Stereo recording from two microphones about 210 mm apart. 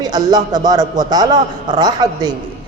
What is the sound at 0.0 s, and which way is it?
A man's voice, 20° right (ahead or behind).